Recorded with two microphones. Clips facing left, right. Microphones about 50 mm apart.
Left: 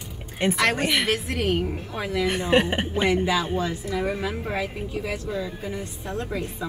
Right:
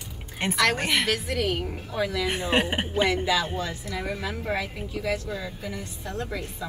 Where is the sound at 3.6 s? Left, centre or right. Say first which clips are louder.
Left 5 dB; left.